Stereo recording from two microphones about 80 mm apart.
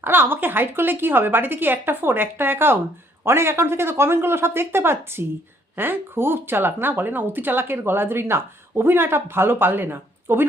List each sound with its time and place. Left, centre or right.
0.0 s speech: right